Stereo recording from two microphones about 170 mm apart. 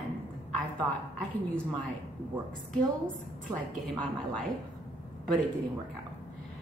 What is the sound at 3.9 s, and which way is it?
Speech, 5° left (ahead or behind).